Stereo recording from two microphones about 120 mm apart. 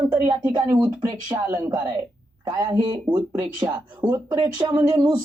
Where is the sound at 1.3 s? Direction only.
25° right (ahead or behind).